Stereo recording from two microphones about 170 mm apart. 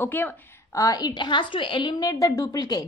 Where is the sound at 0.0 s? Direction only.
10° left (ahead or behind).